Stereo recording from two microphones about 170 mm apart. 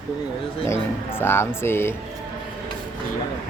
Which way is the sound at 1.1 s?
15° left (ahead or behind).